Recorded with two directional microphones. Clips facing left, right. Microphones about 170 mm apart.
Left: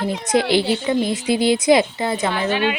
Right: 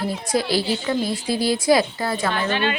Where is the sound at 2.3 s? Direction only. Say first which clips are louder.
Left 2 dB; 10° left (ahead or behind).